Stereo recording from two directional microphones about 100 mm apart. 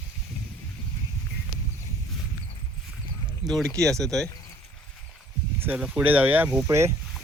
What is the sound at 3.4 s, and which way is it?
Speech, 5° left (ahead or behind).